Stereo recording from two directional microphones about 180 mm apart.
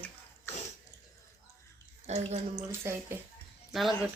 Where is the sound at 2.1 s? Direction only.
40° right (ahead or behind).